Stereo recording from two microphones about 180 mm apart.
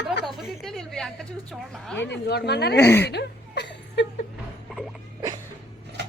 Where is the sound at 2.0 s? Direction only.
70° left (ahead or behind).